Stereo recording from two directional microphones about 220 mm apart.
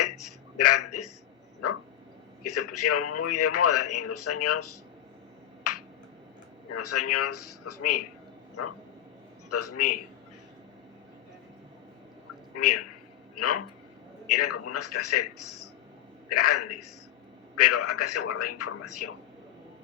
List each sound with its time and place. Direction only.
0.0 s a sound: 90° left
2.4 s a man's voice: 90° left
6.7 s a man's voice: 90° left
9.5 s a man's voice: 90° left
12.5 s a man's voice: 90° left